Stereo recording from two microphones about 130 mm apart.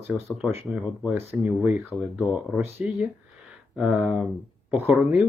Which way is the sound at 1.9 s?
35° left (ahead or behind).